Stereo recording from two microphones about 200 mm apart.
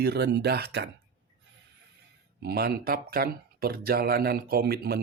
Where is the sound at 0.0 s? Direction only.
55° right (ahead or behind).